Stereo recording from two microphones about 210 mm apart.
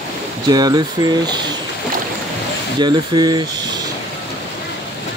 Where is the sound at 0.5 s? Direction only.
20° right (ahead or behind).